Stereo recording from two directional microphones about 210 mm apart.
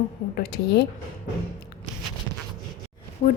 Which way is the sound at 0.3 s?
50° left (ahead or behind).